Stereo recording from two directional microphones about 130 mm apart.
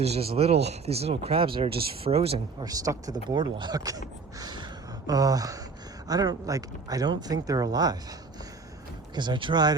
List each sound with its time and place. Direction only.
0.0 s speech: 50° right (ahead or behind)
2.6 s speech: 30° right (ahead or behind)
9.1 s speech: 35° right (ahead or behind)